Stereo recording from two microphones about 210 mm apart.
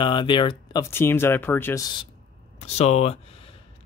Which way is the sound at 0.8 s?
10° left (ahead or behind).